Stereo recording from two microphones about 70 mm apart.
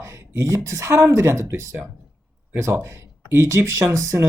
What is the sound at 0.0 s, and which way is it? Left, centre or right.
Speech, right.